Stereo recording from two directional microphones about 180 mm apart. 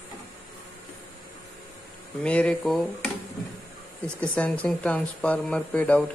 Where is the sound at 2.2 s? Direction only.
5° left (ahead or behind).